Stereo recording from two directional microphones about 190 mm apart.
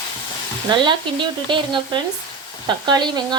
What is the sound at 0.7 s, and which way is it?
A woman's voice, 25° right (ahead or behind).